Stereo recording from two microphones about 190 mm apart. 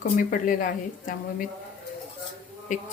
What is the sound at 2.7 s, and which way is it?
Speech, 45° left (ahead or behind).